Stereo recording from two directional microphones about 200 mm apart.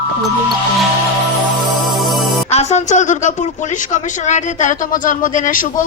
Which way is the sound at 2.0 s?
Centre (ahead or behind).